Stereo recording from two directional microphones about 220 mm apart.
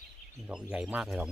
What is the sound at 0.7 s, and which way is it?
Speech, 5° right (ahead or behind).